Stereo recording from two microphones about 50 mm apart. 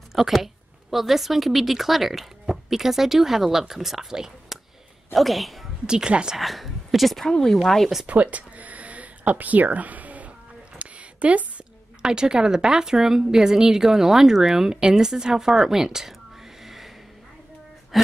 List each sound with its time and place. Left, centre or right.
0.1 s a woman's voice: centre
5.9 s speech: centre
6.3 s speech: centre
8.1 s a sound: right
12.0 s speech: centre
16.6 s vehicle: centre
17.9 s a sound: centre